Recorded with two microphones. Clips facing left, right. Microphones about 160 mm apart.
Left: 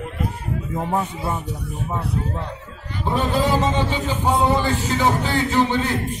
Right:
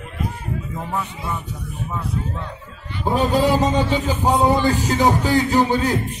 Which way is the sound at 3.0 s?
40° right (ahead or behind).